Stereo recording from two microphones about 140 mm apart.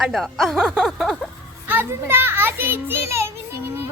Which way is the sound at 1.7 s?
15° right (ahead or behind).